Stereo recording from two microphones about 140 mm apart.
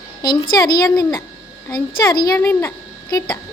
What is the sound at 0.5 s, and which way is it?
A woman's voice, 30° left (ahead or behind).